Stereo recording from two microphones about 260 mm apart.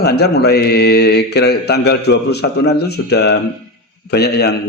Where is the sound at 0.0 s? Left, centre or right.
Left.